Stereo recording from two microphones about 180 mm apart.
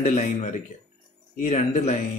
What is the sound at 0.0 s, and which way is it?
Speech, 40° left (ahead or behind).